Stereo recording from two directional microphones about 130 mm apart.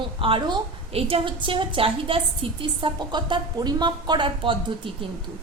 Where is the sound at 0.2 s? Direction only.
40° right (ahead or behind).